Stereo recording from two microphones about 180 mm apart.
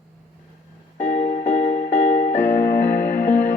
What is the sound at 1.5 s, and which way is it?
Music, 35° left (ahead or behind).